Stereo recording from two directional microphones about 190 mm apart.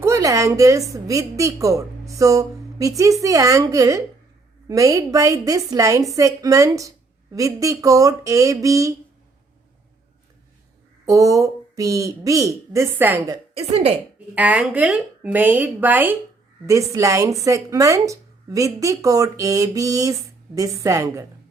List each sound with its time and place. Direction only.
0.0 s a woman's voice: 15° right (ahead or behind)
11.0 s speech: 15° right (ahead or behind)
13.6 s speech: 35° right (ahead or behind)
14.3 s speech: 10° right (ahead or behind)